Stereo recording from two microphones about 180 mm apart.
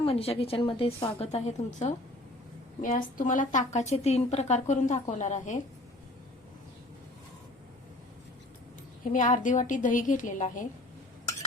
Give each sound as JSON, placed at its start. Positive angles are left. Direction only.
{"t": 0.0, "sound": "a woman's voice", "side_deg": 35}
{"t": 9.1, "sound": "a woman's voice", "side_deg": 45}